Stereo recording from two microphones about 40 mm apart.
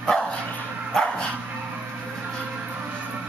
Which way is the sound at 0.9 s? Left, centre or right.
Centre.